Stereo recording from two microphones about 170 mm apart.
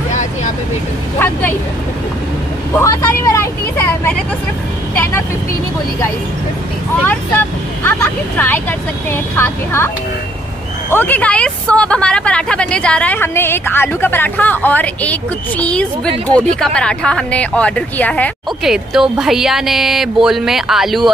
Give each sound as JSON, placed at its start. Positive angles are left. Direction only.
{"t": 2.8, "sound": "speech", "side_deg": 15}
{"t": 7.0, "sound": "speech", "side_deg": 10}
{"t": 10.9, "sound": "speech", "side_deg": 10}
{"t": 18.6, "sound": "speech", "side_deg": 0}